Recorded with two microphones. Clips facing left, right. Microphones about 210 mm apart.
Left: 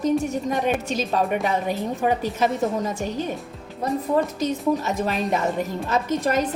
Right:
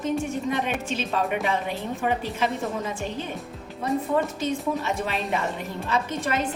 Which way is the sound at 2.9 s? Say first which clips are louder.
Left 4 dB; 40° left (ahead or behind).